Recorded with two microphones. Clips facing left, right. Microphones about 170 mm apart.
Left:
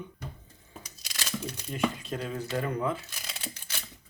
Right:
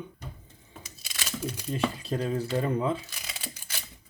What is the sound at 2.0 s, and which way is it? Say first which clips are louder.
Speech: right 5 dB; 35° right (ahead or behind).